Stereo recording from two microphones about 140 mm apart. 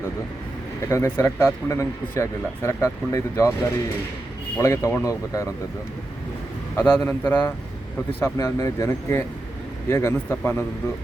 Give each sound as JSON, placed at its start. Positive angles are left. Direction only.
{"t": 0.9, "sound": "a man's voice", "side_deg": 15}
{"t": 4.5, "sound": "speech", "side_deg": 20}
{"t": 6.7, "sound": "a man's voice", "side_deg": 15}